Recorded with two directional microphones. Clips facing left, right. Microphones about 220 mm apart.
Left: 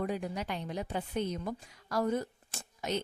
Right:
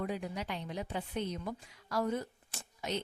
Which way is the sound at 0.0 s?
45° left (ahead or behind).